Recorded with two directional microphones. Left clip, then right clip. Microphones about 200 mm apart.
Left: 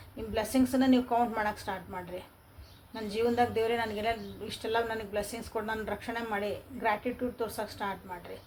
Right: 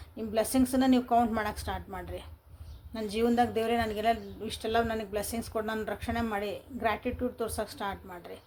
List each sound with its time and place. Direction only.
0.3 s speech: 60° right (ahead or behind)